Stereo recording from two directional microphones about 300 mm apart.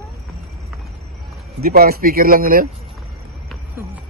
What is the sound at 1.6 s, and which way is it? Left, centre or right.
Speech, right.